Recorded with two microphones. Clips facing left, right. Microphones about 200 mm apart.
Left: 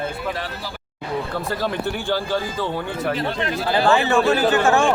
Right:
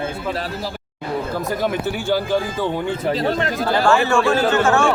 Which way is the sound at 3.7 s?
15° left (ahead or behind).